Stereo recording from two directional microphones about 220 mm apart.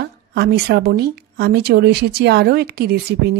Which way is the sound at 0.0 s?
50° right (ahead or behind).